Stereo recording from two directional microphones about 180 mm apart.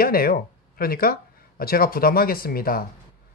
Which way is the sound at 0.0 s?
55° left (ahead or behind).